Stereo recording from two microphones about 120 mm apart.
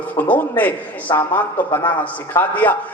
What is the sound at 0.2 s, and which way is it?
A man's voice, 15° left (ahead or behind).